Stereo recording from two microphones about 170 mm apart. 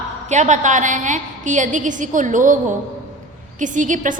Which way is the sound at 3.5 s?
50° right (ahead or behind).